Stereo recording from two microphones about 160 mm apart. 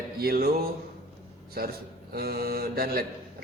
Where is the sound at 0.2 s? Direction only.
70° right (ahead or behind).